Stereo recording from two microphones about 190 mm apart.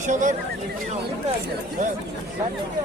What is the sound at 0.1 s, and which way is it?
Speech, 40° right (ahead or behind).